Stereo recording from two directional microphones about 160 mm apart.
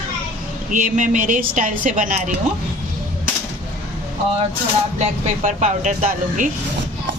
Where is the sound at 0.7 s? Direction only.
55° right (ahead or behind).